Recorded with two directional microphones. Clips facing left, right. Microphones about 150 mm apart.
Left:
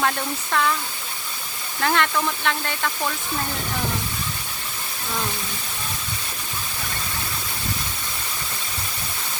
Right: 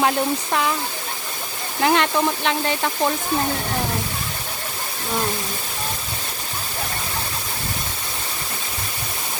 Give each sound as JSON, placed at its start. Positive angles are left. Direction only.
{"t": 0.0, "sound": "speech", "side_deg": -20}
{"t": 1.8, "sound": "speech", "side_deg": -20}